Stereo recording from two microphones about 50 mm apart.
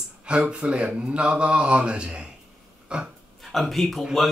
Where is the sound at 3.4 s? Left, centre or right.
Centre.